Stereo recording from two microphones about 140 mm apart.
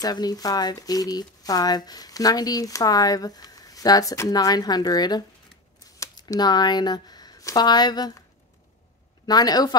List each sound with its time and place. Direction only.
0.0 s speech: 30° left (ahead or behind)
9.2 s speech: 30° left (ahead or behind)